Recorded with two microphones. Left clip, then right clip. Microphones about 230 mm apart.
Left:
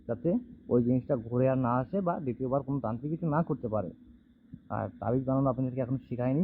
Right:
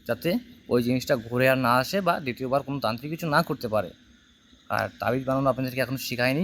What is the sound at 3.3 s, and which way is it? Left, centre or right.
Speech, right.